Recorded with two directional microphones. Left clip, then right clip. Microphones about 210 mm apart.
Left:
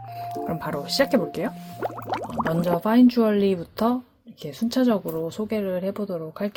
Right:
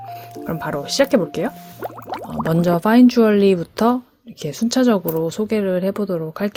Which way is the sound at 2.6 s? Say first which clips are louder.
Right 6 dB; 30° right (ahead or behind).